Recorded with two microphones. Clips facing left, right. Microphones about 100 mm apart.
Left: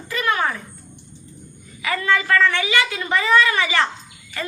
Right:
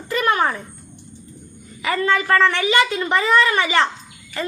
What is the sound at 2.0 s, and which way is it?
A woman's voice, 30° right (ahead or behind).